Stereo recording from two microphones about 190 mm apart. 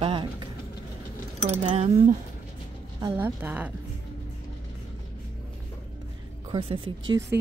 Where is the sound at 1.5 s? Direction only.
35° right (ahead or behind).